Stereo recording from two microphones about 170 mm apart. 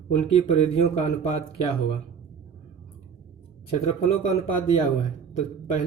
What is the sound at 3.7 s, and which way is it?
A man's voice, 35° left (ahead or behind).